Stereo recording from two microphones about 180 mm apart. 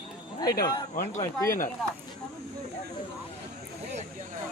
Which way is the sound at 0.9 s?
40° left (ahead or behind).